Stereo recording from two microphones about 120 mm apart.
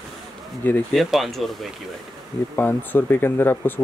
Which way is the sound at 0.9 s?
Centre (ahead or behind).